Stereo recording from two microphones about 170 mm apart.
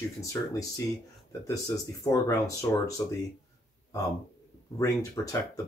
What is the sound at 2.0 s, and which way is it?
Speech, 20° left (ahead or behind).